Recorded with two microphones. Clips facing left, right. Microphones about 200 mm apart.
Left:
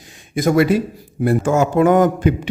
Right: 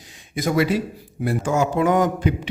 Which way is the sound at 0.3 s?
50° left (ahead or behind).